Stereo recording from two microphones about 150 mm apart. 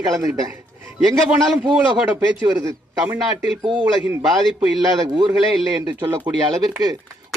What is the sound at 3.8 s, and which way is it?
Speech, 10° right (ahead or behind).